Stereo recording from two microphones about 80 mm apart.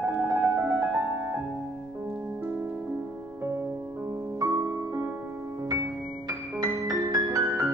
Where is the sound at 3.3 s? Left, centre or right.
Right.